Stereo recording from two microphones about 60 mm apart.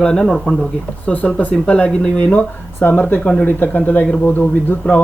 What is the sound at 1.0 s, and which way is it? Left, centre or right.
Speech, left.